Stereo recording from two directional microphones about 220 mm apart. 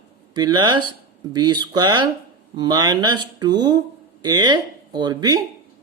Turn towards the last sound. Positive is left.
turn(degrees=-20)  # may be behind; listen again after turning